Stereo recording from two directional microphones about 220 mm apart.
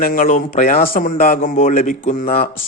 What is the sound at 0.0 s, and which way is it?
Speech, 40° left (ahead or behind).